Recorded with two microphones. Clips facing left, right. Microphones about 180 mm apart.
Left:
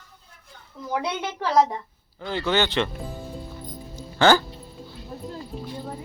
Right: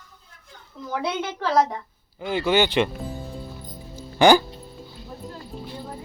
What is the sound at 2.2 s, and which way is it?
Speech, 10° right (ahead or behind).